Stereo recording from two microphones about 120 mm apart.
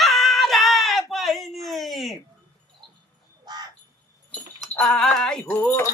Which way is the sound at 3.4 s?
35° right (ahead or behind).